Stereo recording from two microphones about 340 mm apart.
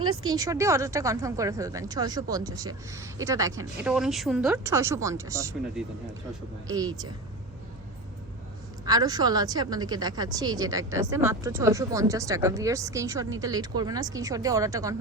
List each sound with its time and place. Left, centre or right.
0.0 s a woman's voice: right
0.3 s speech: centre
8.8 s speech: centre